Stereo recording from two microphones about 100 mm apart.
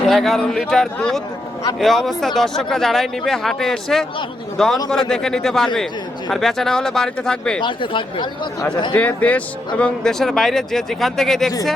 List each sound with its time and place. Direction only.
0.1 s a man's voice: 5° left (ahead or behind)
7.6 s speech: 55° left (ahead or behind)
8.9 s a man's voice: 15° left (ahead or behind)